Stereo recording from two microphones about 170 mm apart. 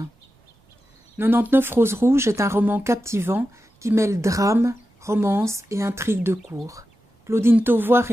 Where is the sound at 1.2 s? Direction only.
15° right (ahead or behind).